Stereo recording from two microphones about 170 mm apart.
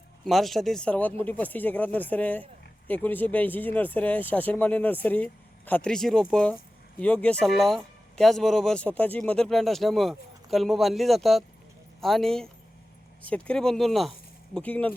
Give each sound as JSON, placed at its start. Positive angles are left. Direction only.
{"t": 0.3, "sound": "speech", "side_deg": 0}